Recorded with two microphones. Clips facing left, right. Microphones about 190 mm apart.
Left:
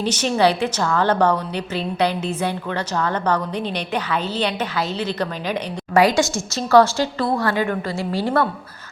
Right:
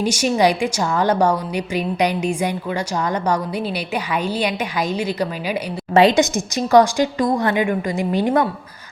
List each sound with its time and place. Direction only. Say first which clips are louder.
0.0 s a woman's voice: right 1 dB; 10° right (ahead or behind)
5.9 s a woman's voice: right 3 dB; 25° right (ahead or behind)